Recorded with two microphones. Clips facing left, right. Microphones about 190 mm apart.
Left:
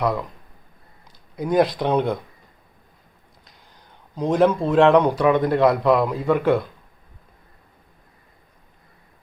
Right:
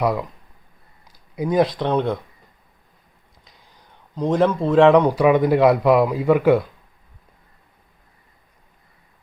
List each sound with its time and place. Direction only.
1.4 s speech: centre (ahead or behind)
4.1 s a man's voice: 5° left (ahead or behind)